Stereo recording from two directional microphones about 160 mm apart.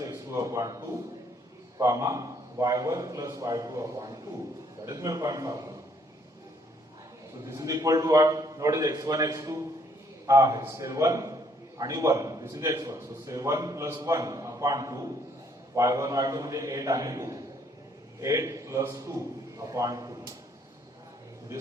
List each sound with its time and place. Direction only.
0.0 s a sound: 20° right (ahead or behind)
1.8 s a man's voice: 20° right (ahead or behind)
7.4 s a man's voice: 20° right (ahead or behind)